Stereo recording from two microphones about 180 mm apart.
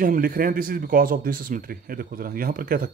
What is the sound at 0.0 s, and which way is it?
Speech, 50° right (ahead or behind).